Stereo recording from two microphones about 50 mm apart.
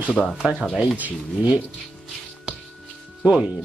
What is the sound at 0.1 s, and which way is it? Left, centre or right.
Speech, centre.